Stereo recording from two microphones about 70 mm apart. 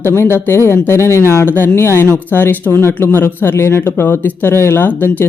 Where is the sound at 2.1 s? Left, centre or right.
Left.